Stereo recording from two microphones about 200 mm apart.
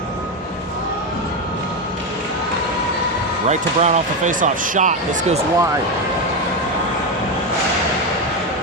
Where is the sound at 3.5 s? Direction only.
35° right (ahead or behind).